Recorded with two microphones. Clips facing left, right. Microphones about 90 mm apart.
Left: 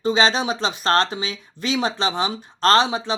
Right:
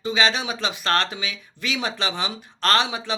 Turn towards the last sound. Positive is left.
turn(degrees=30)  # may be behind; listen again after turning